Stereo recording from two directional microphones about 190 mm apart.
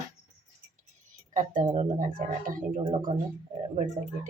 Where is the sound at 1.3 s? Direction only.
45° right (ahead or behind).